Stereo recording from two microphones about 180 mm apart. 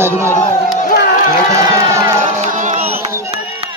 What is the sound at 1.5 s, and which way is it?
Crowd, 15° right (ahead or behind).